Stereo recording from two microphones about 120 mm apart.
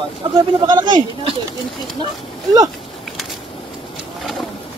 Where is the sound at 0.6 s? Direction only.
35° right (ahead or behind).